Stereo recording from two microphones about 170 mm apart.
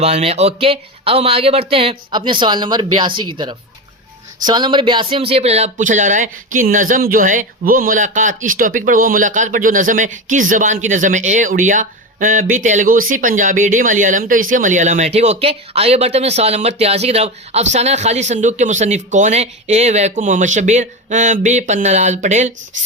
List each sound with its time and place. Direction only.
0.0 s speech: 40° right (ahead or behind)